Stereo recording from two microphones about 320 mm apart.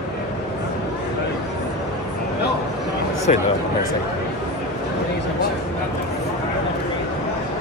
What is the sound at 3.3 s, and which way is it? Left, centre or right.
Speech, left.